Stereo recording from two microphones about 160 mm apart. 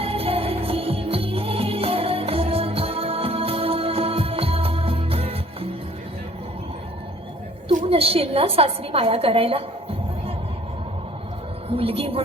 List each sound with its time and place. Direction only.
0.0 s music: 35° right (ahead or behind)
7.9 s a woman's voice: 35° right (ahead or behind)
11.7 s a woman's voice: 35° right (ahead or behind)